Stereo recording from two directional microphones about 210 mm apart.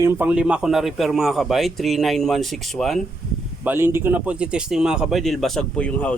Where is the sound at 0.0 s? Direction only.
10° right (ahead or behind).